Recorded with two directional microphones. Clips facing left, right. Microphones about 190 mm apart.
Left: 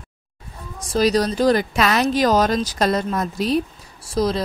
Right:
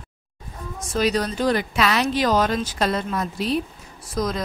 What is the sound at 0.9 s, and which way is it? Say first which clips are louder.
Speech: left 4 dB; 40° left (ahead or behind).